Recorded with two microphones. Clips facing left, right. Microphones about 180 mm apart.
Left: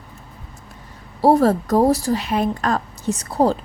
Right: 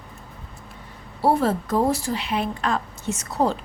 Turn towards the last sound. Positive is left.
turn(degrees=35)  # may be behind; listen again after turning